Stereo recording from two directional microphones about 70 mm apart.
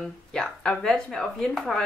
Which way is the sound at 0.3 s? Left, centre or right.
Centre.